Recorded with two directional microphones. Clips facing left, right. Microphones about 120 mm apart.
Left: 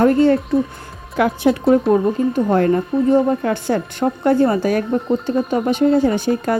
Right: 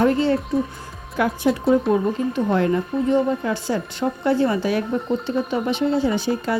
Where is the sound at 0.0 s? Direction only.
50° left (ahead or behind).